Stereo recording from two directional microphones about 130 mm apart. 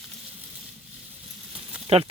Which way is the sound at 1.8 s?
50° right (ahead or behind).